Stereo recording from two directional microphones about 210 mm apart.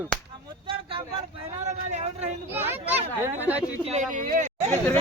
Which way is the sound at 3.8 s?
35° right (ahead or behind).